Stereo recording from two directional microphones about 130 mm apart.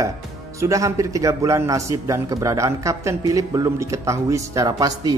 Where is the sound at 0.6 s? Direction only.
25° right (ahead or behind).